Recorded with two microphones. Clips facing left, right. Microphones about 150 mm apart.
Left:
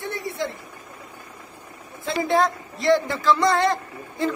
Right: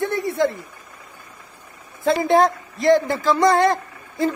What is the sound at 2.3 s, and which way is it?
A man's voice, 50° right (ahead or behind).